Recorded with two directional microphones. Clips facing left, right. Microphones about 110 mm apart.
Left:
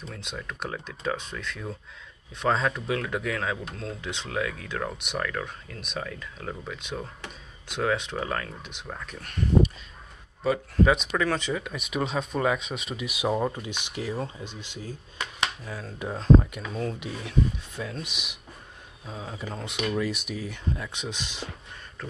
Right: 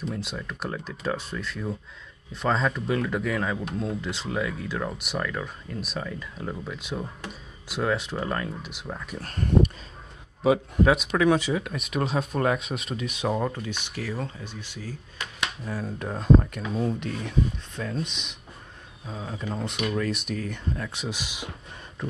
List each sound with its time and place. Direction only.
0.1 s speech: 5° right (ahead or behind)
9.2 s speech: 45° right (ahead or behind)
10.8 s speech: 5° right (ahead or behind); by 15.0 s 20° left (ahead or behind)
15.6 s speech: 5° right (ahead or behind)